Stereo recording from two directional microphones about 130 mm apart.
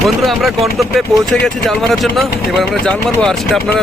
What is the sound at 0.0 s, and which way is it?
Speech, centre (ahead or behind).